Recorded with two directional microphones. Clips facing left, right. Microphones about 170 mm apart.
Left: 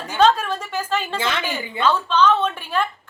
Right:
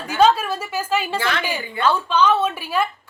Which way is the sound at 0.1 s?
10° right (ahead or behind).